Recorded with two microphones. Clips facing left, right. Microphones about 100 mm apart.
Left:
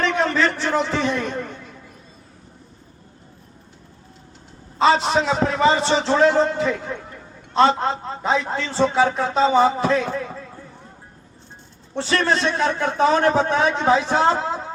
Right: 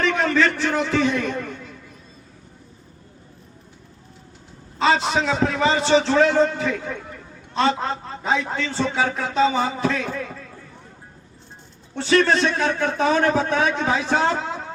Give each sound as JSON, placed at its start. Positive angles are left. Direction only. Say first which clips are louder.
{"t": 0.0, "sound": "a man's voice", "louder": "even", "side_deg": 30}
{"t": 4.8, "sound": "a man's voice", "louder": "left 2 dB", "side_deg": 35}
{"t": 12.1, "sound": "a man's voice", "louder": "right 3 dB", "side_deg": 35}